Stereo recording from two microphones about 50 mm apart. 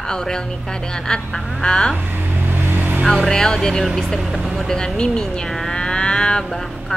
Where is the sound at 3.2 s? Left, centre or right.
Centre.